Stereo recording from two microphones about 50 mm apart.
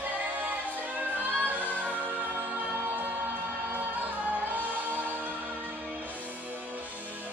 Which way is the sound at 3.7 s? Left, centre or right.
Right.